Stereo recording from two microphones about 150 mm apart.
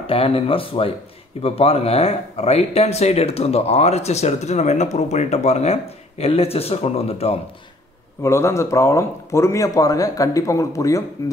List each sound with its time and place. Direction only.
0.0 s speech: 40° left (ahead or behind)
8.2 s speech: 20° left (ahead or behind)